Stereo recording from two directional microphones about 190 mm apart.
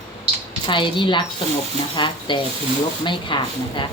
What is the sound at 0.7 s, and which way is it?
A woman's voice, 25° left (ahead or behind).